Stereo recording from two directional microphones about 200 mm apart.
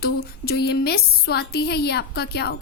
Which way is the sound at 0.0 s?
50° left (ahead or behind).